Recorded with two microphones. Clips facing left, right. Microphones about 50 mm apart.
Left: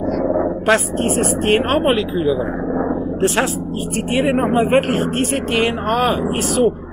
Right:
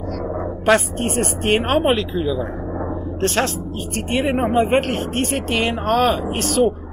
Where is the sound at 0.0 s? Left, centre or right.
Centre.